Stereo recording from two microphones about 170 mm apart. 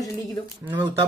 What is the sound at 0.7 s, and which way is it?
Speech, 15° right (ahead or behind).